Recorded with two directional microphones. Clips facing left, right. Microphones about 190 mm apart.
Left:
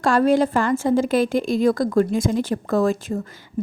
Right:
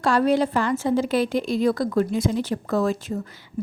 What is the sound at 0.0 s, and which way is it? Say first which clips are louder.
A woman's voice: left 3 dB; 50° left (ahead or behind).